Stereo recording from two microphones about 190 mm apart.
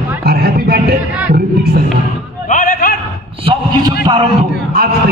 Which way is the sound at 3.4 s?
25° right (ahead or behind).